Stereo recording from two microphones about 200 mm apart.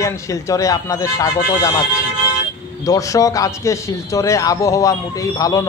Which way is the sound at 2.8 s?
15° left (ahead or behind).